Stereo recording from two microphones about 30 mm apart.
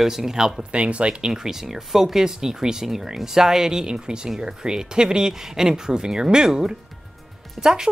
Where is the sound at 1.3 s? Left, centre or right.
Centre.